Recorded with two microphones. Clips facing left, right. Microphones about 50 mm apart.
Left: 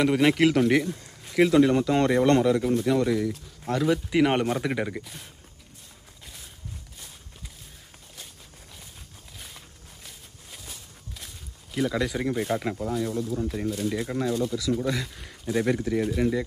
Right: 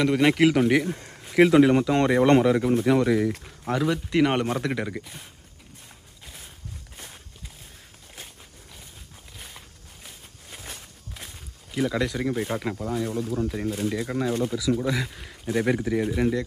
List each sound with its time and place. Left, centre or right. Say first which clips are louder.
0.0 s speech: right 1 dB; centre
0.8 s speech: right 2 dB; right
1.2 s speech: right 3 dB; centre
1.9 s speech: right 1 dB; centre
2.2 s speech: right 2 dB; centre
3.3 s speech: right 3 dB; right
3.7 s speech: even; centre
4.9 s speech: right 1 dB; centre
11.7 s speech: right 1 dB; centre